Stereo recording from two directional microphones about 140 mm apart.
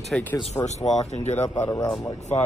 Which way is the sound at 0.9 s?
55° left (ahead or behind).